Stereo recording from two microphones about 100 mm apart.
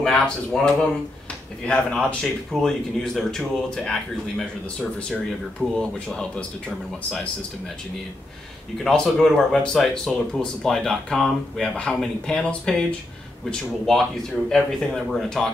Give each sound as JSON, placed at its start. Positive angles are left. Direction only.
{"t": 0.0, "sound": "speech", "side_deg": 5}
{"t": 5.6, "sound": "speech", "side_deg": 10}
{"t": 8.7, "sound": "speech", "side_deg": 5}